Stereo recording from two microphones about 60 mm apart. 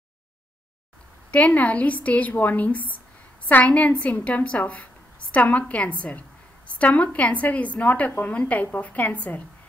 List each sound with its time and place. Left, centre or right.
1.3 s a woman's voice: left